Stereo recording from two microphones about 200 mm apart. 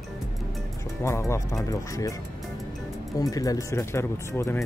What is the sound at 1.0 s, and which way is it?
Speech, 15° left (ahead or behind).